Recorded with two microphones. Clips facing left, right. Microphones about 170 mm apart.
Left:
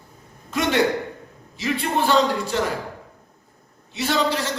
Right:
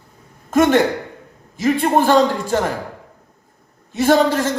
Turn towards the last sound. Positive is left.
turn(degrees=-45)  # may be behind; listen again after turning